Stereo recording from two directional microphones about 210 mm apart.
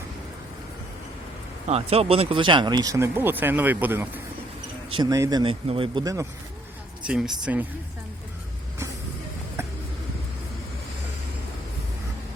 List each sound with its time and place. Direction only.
1.6 s speech: 30° right (ahead or behind); by 4.1 s 10° right (ahead or behind)
4.9 s speech: 20° right (ahead or behind)
7.1 s speech: 5° right (ahead or behind)